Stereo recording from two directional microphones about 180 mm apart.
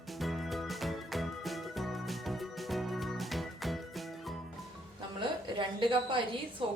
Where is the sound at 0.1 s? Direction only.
Centre (ahead or behind).